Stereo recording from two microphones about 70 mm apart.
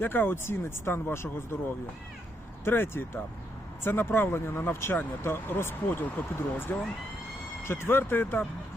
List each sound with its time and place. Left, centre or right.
0.0 s speech: left
2.6 s speech: left